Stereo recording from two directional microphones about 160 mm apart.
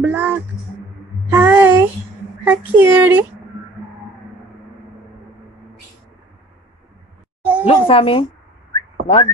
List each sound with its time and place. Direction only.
0.0 s speech: 10° right (ahead or behind)
7.6 s speech: 35° left (ahead or behind)
9.0 s whistling: 35° left (ahead or behind)